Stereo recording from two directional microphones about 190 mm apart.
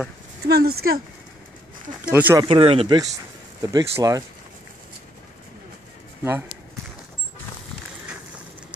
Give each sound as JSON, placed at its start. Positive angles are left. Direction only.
{"t": 0.5, "sound": "speech", "side_deg": -55}
{"t": 2.0, "sound": "speech", "side_deg": -10}
{"t": 2.4, "sound": "speech", "side_deg": -30}
{"t": 3.6, "sound": "speech", "side_deg": -15}